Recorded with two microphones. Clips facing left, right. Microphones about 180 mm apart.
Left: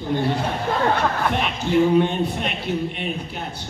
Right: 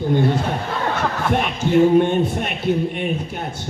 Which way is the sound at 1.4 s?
45° right (ahead or behind).